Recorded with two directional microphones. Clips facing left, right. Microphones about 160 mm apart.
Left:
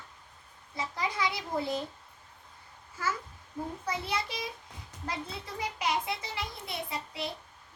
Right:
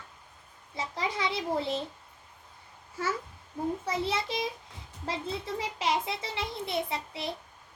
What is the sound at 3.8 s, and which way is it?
Speech, 25° right (ahead or behind).